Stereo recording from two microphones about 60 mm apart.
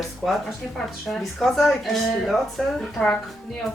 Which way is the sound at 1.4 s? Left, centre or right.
Centre.